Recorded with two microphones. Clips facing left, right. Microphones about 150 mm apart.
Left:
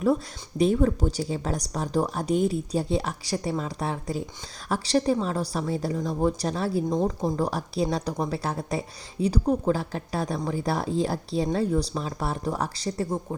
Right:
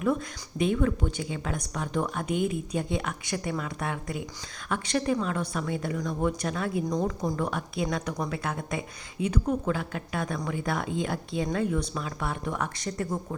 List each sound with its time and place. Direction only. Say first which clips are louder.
0.6 s a woman's voice: left 4 dB; 35° left (ahead or behind)